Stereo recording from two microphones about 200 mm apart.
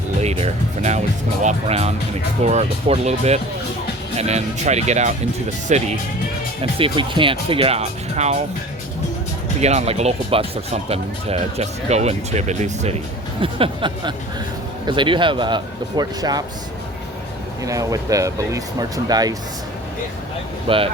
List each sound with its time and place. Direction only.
0.2 s speech: 30° right (ahead or behind)
9.6 s speech: 35° right (ahead or behind)
17.6 s speech: 15° right (ahead or behind)
20.7 s speech: 25° right (ahead or behind)